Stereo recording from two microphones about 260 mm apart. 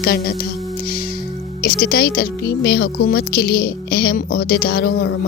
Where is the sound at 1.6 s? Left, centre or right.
Left.